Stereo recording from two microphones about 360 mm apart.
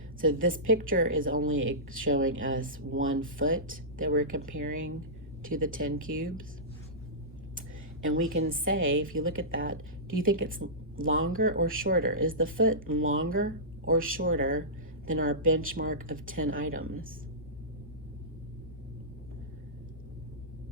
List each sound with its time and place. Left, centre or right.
0.2 s speech: right
1.0 s a woman's voice: right
4.0 s speech: right
8.0 s a woman's voice: right
16.4 s a woman's voice: right